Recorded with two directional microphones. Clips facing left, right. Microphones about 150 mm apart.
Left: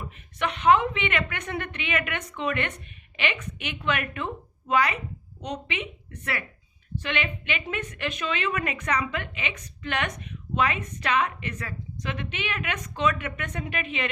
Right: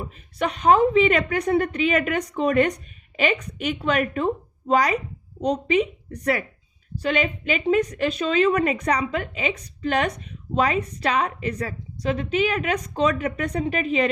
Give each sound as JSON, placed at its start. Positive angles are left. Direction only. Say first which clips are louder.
{"t": 0.0, "sound": "a woman's voice", "louder": "right 4 dB", "side_deg": -35}